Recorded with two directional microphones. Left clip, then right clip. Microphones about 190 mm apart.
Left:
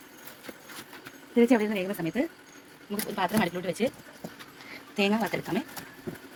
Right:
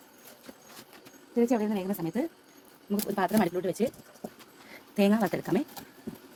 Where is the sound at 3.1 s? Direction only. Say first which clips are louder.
Even; 40° right (ahead or behind).